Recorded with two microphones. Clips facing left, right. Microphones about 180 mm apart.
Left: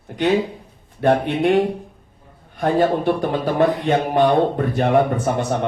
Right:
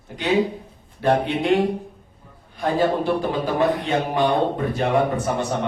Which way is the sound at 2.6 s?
60° left (ahead or behind).